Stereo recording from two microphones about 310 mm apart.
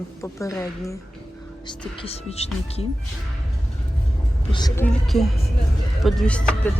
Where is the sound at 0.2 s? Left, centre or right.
Centre.